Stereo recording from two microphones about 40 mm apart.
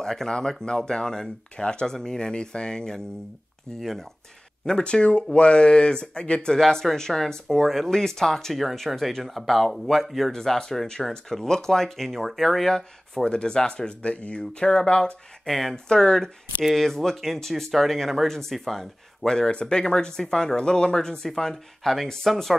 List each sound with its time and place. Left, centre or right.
0.0 s speech: centre
1.6 s speech: left
4.8 s speech: left
6.6 s speech: centre
12.6 s speech: centre; by 14.4 s left
14.5 s speech: centre
15.4 s speech: centre